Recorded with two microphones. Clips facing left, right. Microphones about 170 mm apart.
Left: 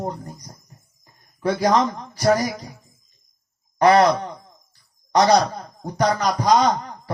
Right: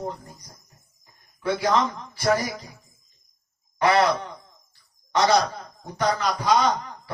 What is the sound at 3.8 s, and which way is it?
Speech, 40° left (ahead or behind).